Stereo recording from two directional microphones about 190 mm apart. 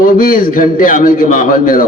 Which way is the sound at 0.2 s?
50° left (ahead or behind).